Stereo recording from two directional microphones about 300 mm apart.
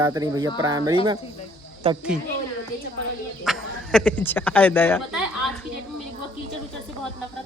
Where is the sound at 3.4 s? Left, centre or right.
Centre.